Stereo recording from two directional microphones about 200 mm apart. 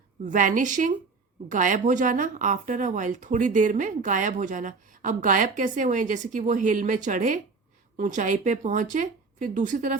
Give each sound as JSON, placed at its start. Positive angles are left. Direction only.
{"t": 0.3, "sound": "speech", "side_deg": -40}